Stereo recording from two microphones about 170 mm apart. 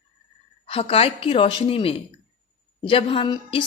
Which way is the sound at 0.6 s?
35° left (ahead or behind).